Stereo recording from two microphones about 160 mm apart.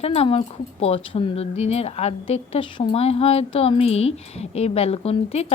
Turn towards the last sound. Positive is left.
turn(degrees=40)  # may be behind; listen again after turning